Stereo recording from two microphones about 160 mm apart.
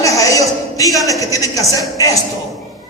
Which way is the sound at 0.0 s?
20° left (ahead or behind).